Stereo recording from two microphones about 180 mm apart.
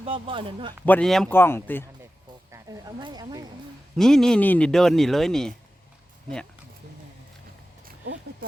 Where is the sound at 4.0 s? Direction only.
5° left (ahead or behind).